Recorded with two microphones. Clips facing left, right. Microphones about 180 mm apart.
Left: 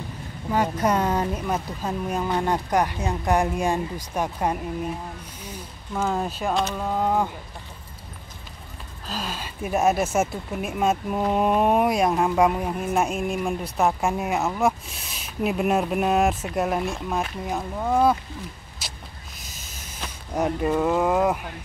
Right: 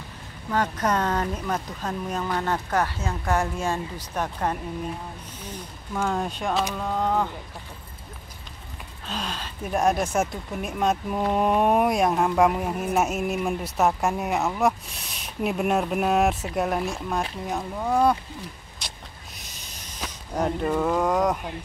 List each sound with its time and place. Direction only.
0.5 s speech: 10° left (ahead or behind)
2.2 s speech: 20° left (ahead or behind)
9.0 s speech: centre (ahead or behind)
18.8 s vehicle: 5° left (ahead or behind)
19.4 s a sound: 5° left (ahead or behind)